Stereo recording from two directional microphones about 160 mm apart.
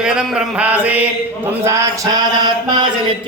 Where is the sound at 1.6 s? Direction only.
20° right (ahead or behind).